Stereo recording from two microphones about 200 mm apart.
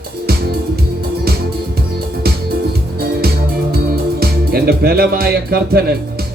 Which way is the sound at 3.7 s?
50° right (ahead or behind).